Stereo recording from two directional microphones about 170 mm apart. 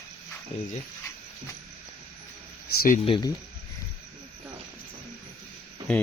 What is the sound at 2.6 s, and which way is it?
Speech, 60° left (ahead or behind).